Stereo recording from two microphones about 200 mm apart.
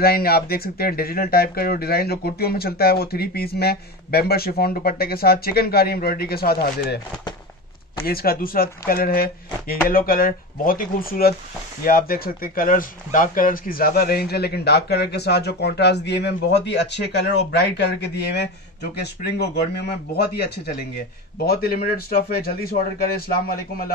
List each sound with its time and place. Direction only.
0.0 s speech: 50° left (ahead or behind)
8.0 s speech: 50° left (ahead or behind)